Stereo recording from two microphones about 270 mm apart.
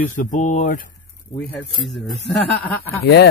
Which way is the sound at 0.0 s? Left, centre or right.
Left.